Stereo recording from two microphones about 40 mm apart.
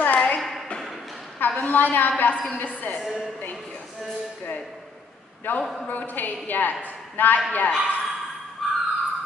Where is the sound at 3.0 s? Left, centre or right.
Centre.